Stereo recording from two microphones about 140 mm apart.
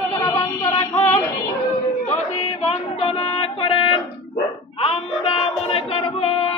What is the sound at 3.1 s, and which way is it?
Music, 40° left (ahead or behind).